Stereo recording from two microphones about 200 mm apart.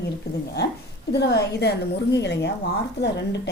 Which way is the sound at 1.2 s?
55° left (ahead or behind).